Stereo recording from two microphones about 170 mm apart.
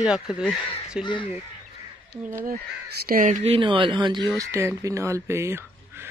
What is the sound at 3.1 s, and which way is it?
Speech, 50° right (ahead or behind).